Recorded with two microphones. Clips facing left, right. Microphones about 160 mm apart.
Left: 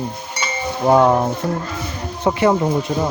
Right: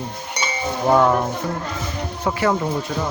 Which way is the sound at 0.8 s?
20° left (ahead or behind).